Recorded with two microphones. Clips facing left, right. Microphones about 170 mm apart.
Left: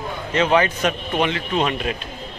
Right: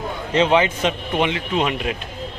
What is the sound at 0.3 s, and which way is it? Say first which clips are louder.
A man's voice: right 1 dB; 20° right (ahead or behind).